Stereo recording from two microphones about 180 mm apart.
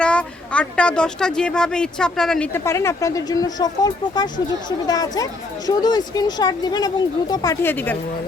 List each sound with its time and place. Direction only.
0.0 s speech: 5° left (ahead or behind)